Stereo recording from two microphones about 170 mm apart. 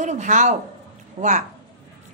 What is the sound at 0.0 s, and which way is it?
Speech, 45° right (ahead or behind).